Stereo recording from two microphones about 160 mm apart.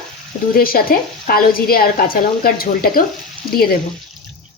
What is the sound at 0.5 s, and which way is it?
Speech, 65° left (ahead or behind).